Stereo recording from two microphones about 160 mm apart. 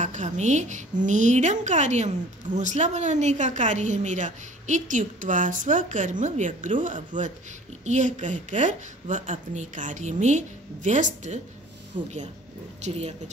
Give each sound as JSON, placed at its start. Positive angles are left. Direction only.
{"t": 0.0, "sound": "a woman's voice", "side_deg": -50}
{"t": 11.9, "sound": "speech", "side_deg": -30}